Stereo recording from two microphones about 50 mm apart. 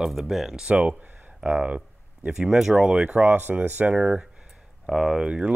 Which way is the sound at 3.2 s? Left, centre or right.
Right.